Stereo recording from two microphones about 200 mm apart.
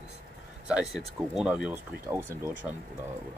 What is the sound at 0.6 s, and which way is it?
Speech, 5° right (ahead or behind).